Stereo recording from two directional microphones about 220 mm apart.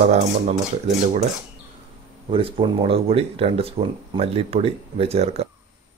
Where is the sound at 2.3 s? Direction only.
25° right (ahead or behind).